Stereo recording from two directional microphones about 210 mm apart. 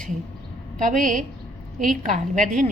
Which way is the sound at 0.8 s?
40° right (ahead or behind).